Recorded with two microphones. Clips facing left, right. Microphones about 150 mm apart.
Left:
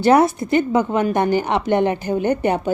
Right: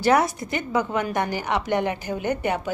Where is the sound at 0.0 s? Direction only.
25° left (ahead or behind).